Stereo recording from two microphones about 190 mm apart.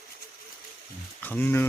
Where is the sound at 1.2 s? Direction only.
10° left (ahead or behind).